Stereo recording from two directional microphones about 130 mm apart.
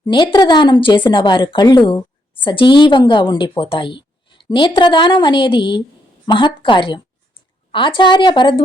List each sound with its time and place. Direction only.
0.0 s a woman's voice: 35° left (ahead or behind)